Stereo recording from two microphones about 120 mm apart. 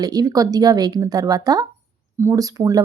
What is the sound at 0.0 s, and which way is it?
Speech, 30° right (ahead or behind).